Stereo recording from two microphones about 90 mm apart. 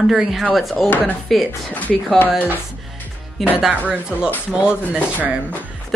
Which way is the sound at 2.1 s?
20° left (ahead or behind).